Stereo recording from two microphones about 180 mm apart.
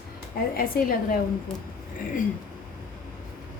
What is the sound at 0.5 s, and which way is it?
Speech, 55° left (ahead or behind).